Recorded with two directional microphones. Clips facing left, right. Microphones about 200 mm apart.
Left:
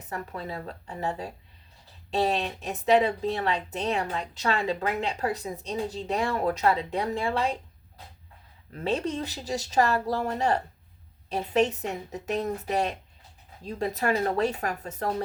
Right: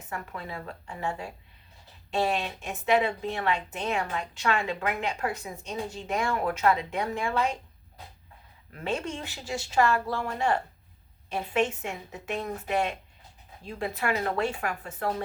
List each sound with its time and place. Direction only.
0.0 s speech: 35° left (ahead or behind)
8.7 s speech: 35° left (ahead or behind)